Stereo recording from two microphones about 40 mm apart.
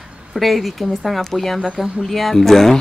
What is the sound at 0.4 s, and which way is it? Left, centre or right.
A woman's voice, centre.